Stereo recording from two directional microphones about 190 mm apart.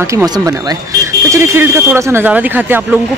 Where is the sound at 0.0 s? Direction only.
20° right (ahead or behind).